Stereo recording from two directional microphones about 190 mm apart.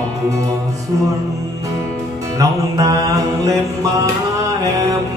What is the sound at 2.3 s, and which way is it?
Music, 15° right (ahead or behind).